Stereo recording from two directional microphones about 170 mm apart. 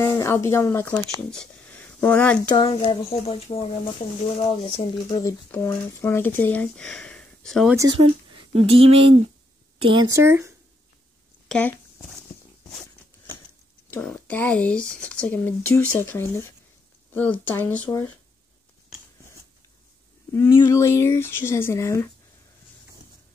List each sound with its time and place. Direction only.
0.0 s speech: 15° left (ahead or behind)
2.6 s speech: 30° left (ahead or behind)
5.5 s speech: 15° left (ahead or behind)
7.7 s speech: 20° right (ahead or behind)
8.5 s speech: 35° right (ahead or behind); by 10.5 s 15° right (ahead or behind)
11.4 s speech: 5° left (ahead or behind)
13.8 s speech: 10° left (ahead or behind)
20.3 s speech: 15° left (ahead or behind)